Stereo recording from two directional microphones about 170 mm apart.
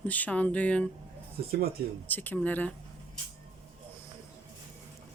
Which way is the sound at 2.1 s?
10° left (ahead or behind).